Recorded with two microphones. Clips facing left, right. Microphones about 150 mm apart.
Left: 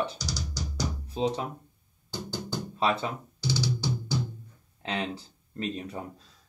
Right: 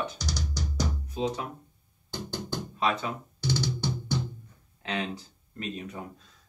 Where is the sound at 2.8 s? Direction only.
30° left (ahead or behind).